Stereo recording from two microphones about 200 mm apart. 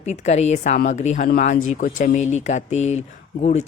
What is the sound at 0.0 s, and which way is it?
Speech, 35° left (ahead or behind).